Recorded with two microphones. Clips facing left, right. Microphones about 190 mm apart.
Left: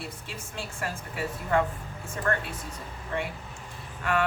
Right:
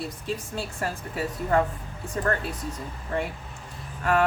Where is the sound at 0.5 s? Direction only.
35° right (ahead or behind).